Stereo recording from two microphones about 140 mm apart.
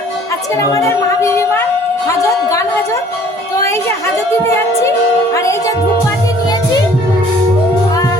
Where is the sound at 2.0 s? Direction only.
20° left (ahead or behind).